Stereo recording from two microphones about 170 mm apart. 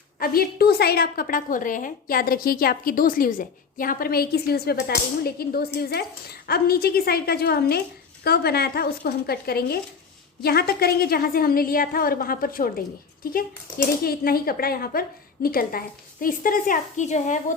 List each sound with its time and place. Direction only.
0.2 s a woman's voice: 65° left (ahead or behind); by 17.4 s 45° left (ahead or behind)